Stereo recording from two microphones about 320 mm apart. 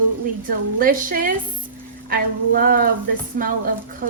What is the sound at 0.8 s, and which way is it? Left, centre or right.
A woman's voice, right.